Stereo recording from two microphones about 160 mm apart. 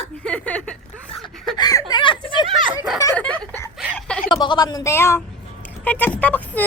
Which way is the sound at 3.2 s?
10° left (ahead or behind).